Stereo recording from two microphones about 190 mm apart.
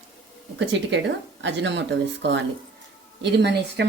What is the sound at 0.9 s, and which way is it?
Speech, 70° right (ahead or behind).